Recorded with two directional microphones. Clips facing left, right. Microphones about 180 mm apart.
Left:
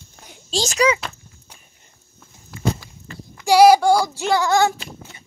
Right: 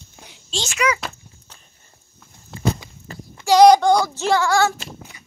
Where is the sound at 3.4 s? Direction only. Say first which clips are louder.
Even; 10° left (ahead or behind).